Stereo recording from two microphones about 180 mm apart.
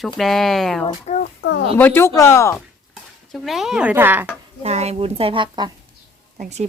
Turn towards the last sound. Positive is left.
turn(degrees=-40)  # may be behind; listen again after turning